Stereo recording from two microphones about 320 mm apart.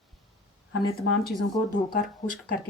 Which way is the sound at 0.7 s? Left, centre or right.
Left.